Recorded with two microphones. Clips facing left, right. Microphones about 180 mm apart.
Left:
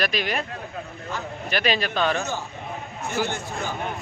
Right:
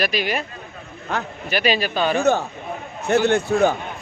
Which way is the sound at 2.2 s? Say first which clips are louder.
Right 11 dB; 60° right (ahead or behind).